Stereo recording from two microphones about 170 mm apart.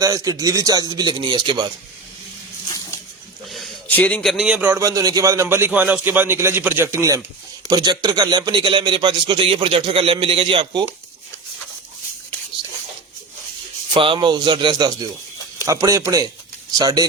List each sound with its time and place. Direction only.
0.0 s a man's voice: 20° right (ahead or behind)
3.5 s a sound: centre (ahead or behind)
3.9 s a man's voice: 10° left (ahead or behind); by 10.8 s 25° right (ahead or behind)
13.9 s a man's voice: 30° right (ahead or behind)